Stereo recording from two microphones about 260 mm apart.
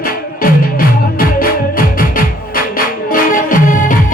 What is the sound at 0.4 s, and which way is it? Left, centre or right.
Music, left.